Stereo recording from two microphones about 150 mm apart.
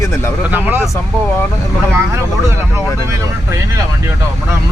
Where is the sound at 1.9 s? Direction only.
20° right (ahead or behind).